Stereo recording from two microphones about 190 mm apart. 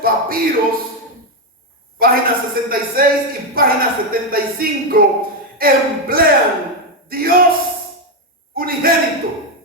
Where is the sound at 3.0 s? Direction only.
50° right (ahead or behind).